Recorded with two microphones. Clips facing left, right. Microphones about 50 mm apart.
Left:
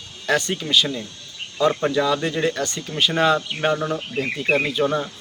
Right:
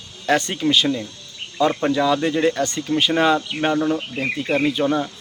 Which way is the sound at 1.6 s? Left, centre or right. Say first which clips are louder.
Right 1 dB; centre.